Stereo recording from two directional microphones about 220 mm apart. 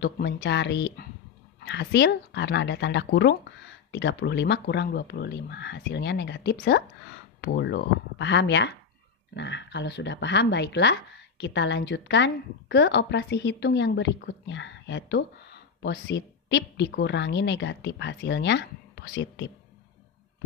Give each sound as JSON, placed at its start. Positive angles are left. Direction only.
{"t": 0.0, "sound": "a woman's voice", "side_deg": 50}